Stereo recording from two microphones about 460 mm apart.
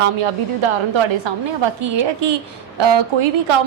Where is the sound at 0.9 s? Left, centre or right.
Right.